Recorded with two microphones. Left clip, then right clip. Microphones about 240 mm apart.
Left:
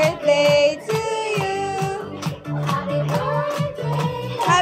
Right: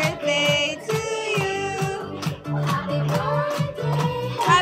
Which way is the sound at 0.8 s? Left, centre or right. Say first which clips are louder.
Left 2 dB; centre.